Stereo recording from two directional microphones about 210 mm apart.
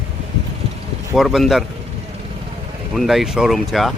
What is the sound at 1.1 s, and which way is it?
Speech, centre (ahead or behind).